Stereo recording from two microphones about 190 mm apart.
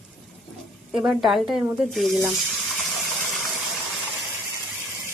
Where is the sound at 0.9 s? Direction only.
Centre (ahead or behind).